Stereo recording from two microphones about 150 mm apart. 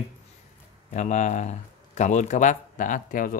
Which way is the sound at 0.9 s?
50° left (ahead or behind).